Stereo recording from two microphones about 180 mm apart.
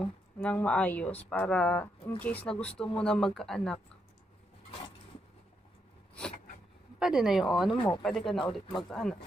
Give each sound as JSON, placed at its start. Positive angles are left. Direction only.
{"t": 0.0, "sound": "speech", "side_deg": 5}
{"t": 7.0, "sound": "speech", "side_deg": -5}
{"t": 7.7, "sound": "speech", "side_deg": 20}
{"t": 8.0, "sound": "speech", "side_deg": 0}